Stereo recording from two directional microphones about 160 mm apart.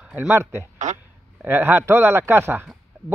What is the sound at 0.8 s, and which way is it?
Speech, 50° right (ahead or behind).